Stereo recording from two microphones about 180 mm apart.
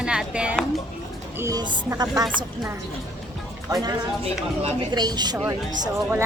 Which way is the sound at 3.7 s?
20° right (ahead or behind).